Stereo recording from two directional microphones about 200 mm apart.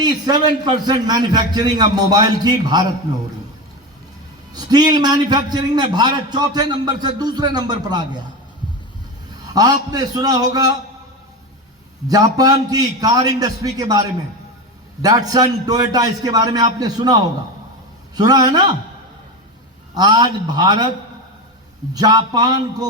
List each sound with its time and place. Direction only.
0.0 s a man's voice: 20° right (ahead or behind)
4.5 s a man's voice: 20° right (ahead or behind)
9.5 s a man's voice: 20° right (ahead or behind)
12.0 s a man's voice: 20° right (ahead or behind)
19.9 s a man's voice: 20° right (ahead or behind)
21.9 s a man's voice: 20° right (ahead or behind)